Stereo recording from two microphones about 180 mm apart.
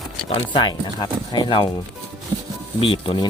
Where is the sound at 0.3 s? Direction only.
25° left (ahead or behind).